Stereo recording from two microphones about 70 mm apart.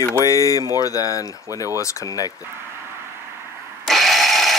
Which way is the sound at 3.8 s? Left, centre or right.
Centre.